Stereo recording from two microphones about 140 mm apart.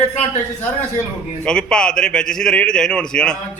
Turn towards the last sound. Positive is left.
turn(degrees=5)  # may be behind; listen again after turning